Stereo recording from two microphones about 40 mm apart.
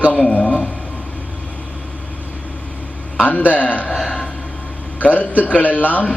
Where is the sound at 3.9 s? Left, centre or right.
Centre.